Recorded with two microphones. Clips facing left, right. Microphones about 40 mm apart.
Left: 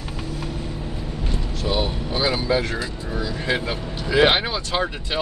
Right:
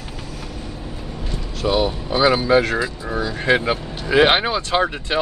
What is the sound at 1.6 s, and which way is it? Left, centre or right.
Speech, right.